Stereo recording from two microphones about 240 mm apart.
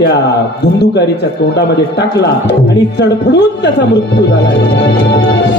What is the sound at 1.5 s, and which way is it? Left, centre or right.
A man's voice, left.